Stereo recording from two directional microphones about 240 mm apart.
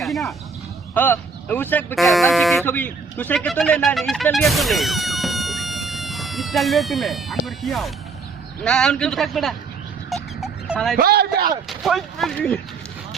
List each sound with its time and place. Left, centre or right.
0.0 s a man's voice: centre
10.4 s fowl: centre
10.9 s a man's voice: right
11.7 s a man's voice: centre